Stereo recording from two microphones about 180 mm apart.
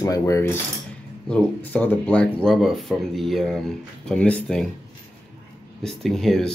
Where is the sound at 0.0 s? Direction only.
20° left (ahead or behind).